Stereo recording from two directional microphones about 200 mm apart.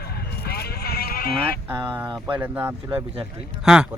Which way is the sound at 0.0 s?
50° left (ahead or behind).